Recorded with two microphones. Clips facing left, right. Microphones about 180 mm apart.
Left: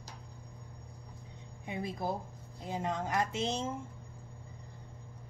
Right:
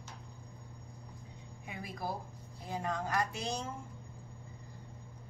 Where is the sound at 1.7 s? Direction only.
25° left (ahead or behind).